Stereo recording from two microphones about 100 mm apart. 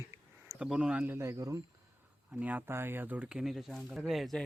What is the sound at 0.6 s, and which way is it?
Speech, 10° right (ahead or behind).